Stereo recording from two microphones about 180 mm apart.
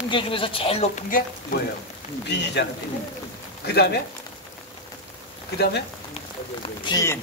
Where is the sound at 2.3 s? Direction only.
70° left (ahead or behind).